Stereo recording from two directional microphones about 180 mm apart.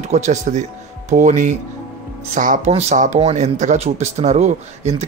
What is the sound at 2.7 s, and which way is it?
Speech, 35° right (ahead or behind).